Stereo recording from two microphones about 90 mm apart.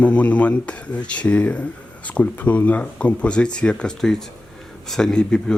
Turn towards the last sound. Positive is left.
turn(degrees=10)  # may be behind; listen again after turning